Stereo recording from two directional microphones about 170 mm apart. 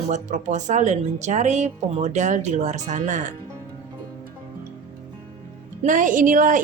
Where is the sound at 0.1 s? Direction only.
45° right (ahead or behind).